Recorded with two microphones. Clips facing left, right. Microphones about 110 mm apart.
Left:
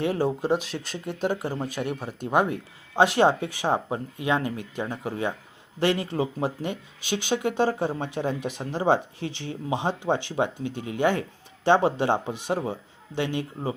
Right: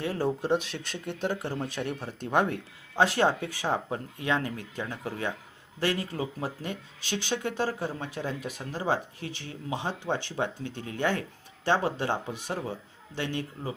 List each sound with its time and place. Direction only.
0.0 s speech: 15° left (ahead or behind)
2.9 s speech: 20° left (ahead or behind)